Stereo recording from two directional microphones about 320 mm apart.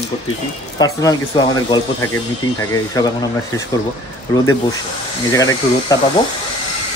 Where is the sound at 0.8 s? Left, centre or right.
Centre.